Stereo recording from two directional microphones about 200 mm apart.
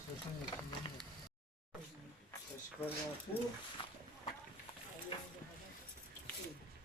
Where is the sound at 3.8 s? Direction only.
25° left (ahead or behind).